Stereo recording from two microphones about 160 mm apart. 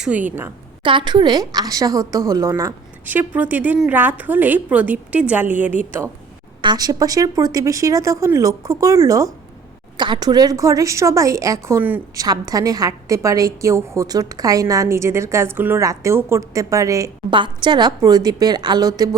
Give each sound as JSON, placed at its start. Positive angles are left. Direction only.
{"t": 0.0, "sound": "a woman's voice", "side_deg": -10}
{"t": 0.8, "sound": "a woman's voice", "side_deg": -30}
{"t": 6.6, "sound": "a woman's voice", "side_deg": -25}
{"t": 12.2, "sound": "a woman's voice", "side_deg": -25}